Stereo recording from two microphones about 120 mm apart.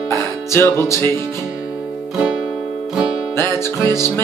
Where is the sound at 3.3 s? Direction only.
20° left (ahead or behind).